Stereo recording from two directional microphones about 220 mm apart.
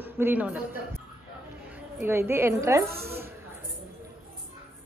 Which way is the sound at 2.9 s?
45° right (ahead or behind).